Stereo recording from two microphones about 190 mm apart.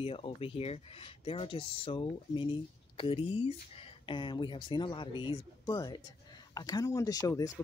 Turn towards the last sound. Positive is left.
turn(degrees=15)  # may be behind; listen again after turning